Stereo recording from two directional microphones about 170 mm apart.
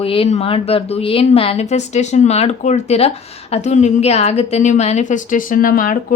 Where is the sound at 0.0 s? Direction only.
35° left (ahead or behind).